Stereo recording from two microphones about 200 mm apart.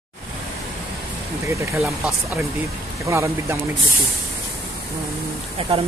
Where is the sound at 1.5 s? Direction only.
15° right (ahead or behind).